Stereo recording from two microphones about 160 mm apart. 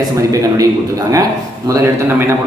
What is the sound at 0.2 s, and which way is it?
A man's voice, 20° right (ahead or behind).